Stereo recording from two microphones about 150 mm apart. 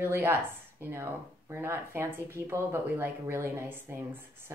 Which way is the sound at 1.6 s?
15° right (ahead or behind).